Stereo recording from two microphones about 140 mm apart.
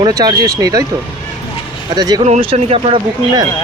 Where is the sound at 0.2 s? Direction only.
25° right (ahead or behind).